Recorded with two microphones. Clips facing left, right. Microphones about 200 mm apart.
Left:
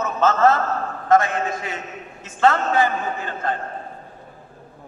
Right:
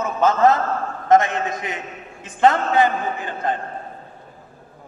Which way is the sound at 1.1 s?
20° right (ahead or behind).